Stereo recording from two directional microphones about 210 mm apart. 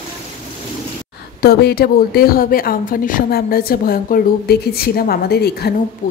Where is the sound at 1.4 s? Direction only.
50° left (ahead or behind).